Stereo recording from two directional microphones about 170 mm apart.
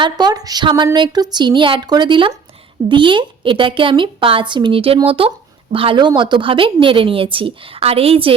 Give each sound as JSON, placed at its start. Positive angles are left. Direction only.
{"t": 0.0, "sound": "a woman's voice", "side_deg": -25}